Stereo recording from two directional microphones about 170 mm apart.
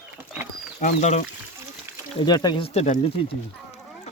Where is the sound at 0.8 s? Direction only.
40° left (ahead or behind).